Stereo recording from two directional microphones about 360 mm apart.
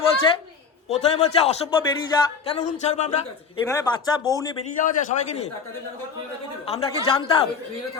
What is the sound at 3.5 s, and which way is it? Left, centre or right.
A man's voice, centre.